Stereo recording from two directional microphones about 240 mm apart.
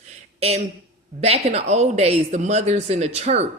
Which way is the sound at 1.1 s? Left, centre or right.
Right.